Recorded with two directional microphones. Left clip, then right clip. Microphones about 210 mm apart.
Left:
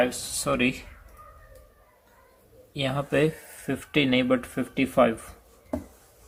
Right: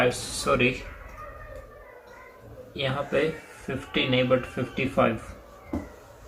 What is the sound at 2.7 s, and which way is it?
Speech, 55° left (ahead or behind).